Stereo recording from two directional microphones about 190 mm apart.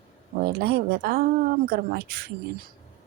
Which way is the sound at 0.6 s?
55° right (ahead or behind).